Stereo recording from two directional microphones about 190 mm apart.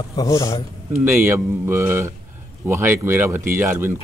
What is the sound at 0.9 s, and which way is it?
Speech, 10° right (ahead or behind).